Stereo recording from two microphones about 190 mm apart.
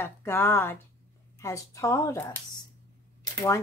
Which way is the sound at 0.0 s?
10° left (ahead or behind).